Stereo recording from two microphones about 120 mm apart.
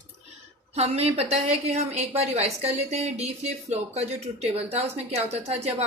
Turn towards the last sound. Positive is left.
turn(degrees=-60)  # may be behind; listen again after turning